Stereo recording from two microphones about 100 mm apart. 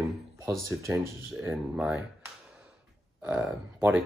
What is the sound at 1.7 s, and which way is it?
Speech, 5° right (ahead or behind).